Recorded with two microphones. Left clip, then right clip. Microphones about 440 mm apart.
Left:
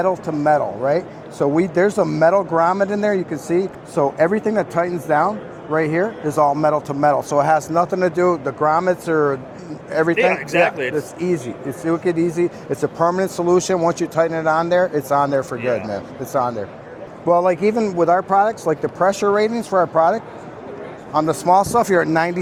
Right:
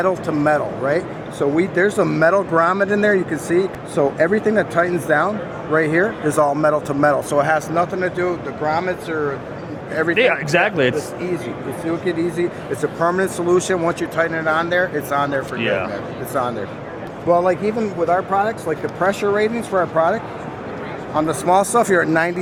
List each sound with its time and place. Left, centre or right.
0.0 s a man's voice: centre
7.8 s speech: left
9.9 s a man's voice: left
10.2 s speech: right
11.9 s speech: left
13.1 s a man's voice: left
14.2 s a man's voice: left